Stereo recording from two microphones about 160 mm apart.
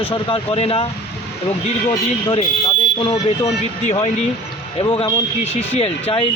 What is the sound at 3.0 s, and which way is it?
Speech, 40° left (ahead or behind).